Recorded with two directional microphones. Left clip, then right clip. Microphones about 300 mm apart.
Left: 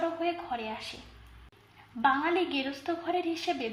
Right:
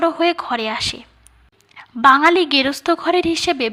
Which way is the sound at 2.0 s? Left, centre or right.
Right.